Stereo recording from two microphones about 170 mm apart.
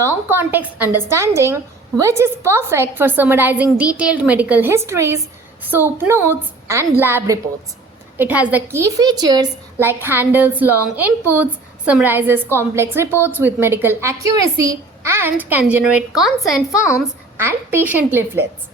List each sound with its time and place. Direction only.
0.0 s a woman's voice: 15° right (ahead or behind)
9.7 s a woman's voice: 10° right (ahead or behind)
17.3 s a woman's voice: 15° right (ahead or behind)